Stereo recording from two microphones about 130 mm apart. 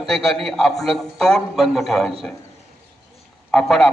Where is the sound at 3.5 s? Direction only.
5° left (ahead or behind).